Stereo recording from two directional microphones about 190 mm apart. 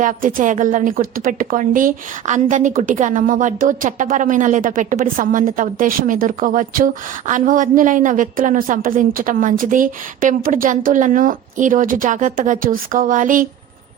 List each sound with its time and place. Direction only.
0.0 s a woman's voice: 45° right (ahead or behind)